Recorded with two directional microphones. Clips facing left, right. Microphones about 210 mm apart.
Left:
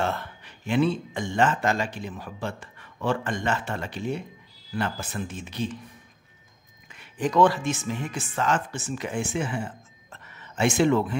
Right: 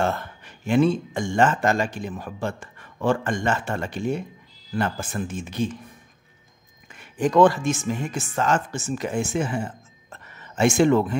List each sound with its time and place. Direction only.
0.0 s a man's voice: 45° right (ahead or behind)
6.9 s speech: 45° right (ahead or behind)